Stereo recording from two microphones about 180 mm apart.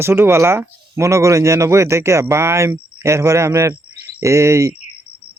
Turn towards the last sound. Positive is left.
turn(degrees=-15)  # may be behind; listen again after turning